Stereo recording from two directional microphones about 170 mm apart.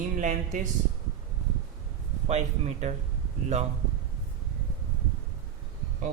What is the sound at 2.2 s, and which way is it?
Speech, 40° right (ahead or behind).